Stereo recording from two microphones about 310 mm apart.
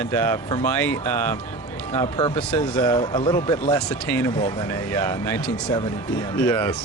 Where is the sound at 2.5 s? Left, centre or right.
Centre.